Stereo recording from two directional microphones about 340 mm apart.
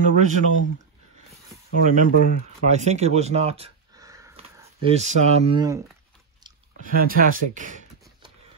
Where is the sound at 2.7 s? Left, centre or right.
Centre.